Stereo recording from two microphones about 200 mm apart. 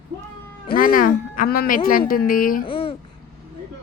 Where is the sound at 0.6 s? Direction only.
45° left (ahead or behind).